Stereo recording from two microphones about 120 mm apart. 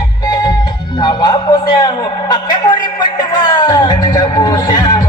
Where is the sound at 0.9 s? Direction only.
40° left (ahead or behind).